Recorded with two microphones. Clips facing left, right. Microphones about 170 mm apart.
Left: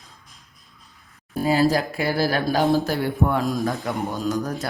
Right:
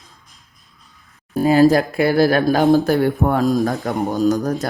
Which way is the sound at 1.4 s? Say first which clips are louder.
Right 7 dB; 55° right (ahead or behind).